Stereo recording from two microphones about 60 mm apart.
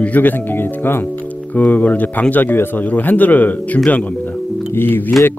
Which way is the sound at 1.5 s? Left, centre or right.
Left.